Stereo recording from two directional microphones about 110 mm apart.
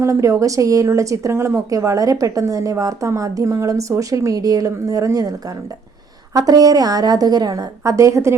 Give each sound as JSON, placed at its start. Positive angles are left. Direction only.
{"t": 0.0, "sound": "a woman's voice", "side_deg": -30}